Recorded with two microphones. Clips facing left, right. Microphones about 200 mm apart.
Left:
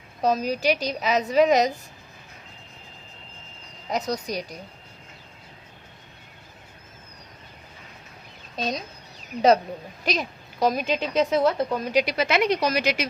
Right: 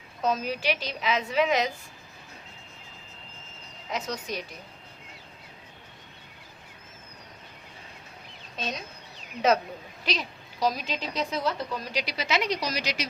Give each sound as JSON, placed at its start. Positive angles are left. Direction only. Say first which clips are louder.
{"t": 0.2, "sound": "a woman's voice", "louder": "left 5 dB", "side_deg": 35}
{"t": 3.8, "sound": "a woman's voice", "louder": "left 5 dB", "side_deg": 40}
{"t": 8.5, "sound": "speech", "louder": "left 6 dB", "side_deg": 35}
{"t": 10.0, "sound": "a woman's voice", "louder": "left 4 dB", "side_deg": 50}